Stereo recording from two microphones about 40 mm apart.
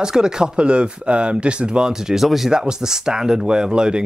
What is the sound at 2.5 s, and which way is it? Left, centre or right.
Speech, centre.